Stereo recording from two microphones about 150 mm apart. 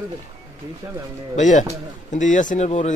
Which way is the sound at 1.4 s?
55° left (ahead or behind).